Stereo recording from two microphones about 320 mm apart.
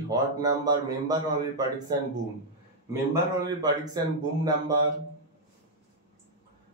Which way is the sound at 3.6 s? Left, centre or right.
Centre.